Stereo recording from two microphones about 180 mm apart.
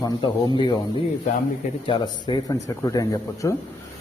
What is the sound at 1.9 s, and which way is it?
Speech, 25° left (ahead or behind).